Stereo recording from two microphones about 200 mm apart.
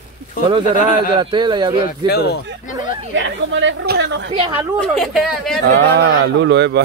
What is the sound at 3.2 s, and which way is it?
Speech, 70° right (ahead or behind).